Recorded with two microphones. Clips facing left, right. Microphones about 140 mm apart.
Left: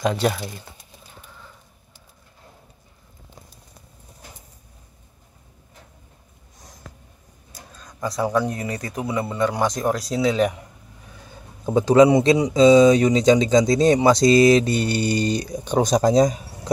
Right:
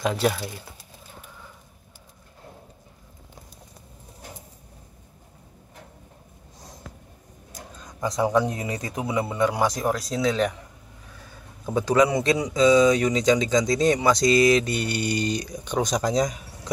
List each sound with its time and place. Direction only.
0.0 s speech: centre (ahead or behind)
7.5 s speech: 20° right (ahead or behind); by 10.5 s 5° left (ahead or behind)
11.2 s speech: 25° left (ahead or behind)